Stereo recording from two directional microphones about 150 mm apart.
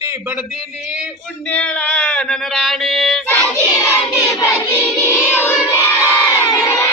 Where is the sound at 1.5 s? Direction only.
10° left (ahead or behind).